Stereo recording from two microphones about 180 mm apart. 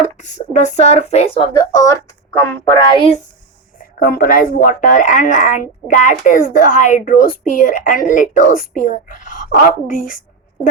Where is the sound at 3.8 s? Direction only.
55° left (ahead or behind).